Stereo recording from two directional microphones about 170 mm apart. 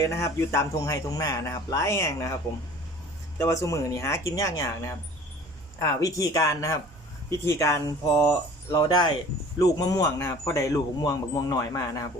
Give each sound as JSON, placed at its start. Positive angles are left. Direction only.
{"t": 0.0, "sound": "a man's voice", "side_deg": 15}
{"t": 3.4, "sound": "speech", "side_deg": 20}
{"t": 5.8, "sound": "a man's voice", "side_deg": 20}